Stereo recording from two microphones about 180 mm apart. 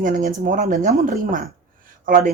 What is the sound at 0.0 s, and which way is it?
Speech, 50° right (ahead or behind).